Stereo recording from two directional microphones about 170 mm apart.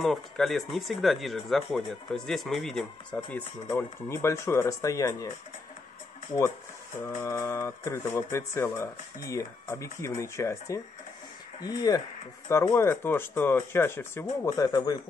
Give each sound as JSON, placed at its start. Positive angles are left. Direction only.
{"t": 0.0, "sound": "speech", "side_deg": 0}
{"t": 7.2, "sound": "speech", "side_deg": 15}